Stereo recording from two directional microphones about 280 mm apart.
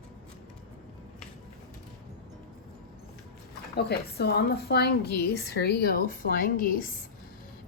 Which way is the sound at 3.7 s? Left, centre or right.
Left.